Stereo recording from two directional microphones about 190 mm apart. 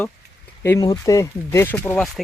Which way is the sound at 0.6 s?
15° left (ahead or behind).